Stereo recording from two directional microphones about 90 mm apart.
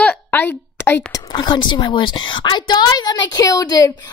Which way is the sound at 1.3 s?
55° left (ahead or behind).